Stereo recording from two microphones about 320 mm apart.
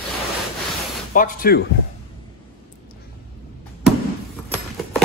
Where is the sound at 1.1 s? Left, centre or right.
Left.